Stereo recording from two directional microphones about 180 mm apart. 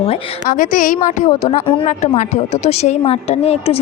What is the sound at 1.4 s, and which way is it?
Speech, 30° left (ahead or behind).